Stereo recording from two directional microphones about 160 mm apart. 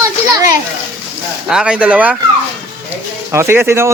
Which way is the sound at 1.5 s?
5° right (ahead or behind).